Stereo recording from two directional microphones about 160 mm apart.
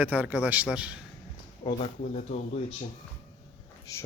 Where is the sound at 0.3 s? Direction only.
10° right (ahead or behind).